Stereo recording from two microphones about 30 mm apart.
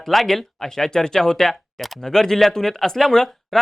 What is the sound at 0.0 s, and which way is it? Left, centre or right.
Speech, centre.